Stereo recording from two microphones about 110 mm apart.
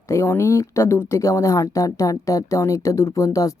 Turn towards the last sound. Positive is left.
turn(degrees=30)  # may be behind; listen again after turning